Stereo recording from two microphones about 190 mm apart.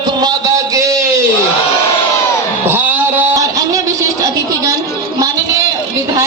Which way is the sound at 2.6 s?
10° right (ahead or behind).